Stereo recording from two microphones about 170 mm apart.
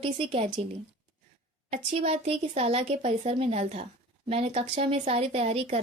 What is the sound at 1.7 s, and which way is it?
A woman's voice, 35° right (ahead or behind).